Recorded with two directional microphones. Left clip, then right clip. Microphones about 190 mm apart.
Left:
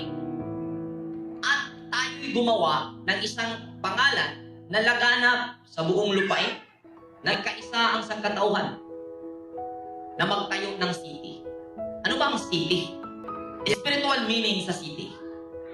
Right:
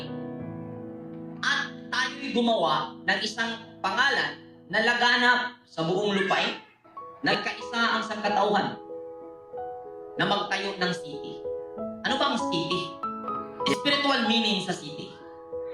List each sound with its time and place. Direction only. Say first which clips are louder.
1.4 s music: left 1 dB; 30° left (ahead or behind)
4.7 s a man's voice: left 1 dB; 30° left (ahead or behind)
7.3 s a man's voice: even; 30° left (ahead or behind)
10.2 s a man's voice: even; 30° left (ahead or behind)
12.0 s music: even; 30° left (ahead or behind)
13.7 s a man's voice: even; 30° left (ahead or behind)